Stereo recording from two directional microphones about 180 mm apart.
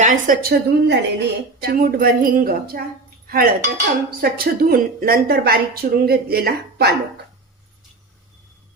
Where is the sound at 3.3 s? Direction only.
55° right (ahead or behind).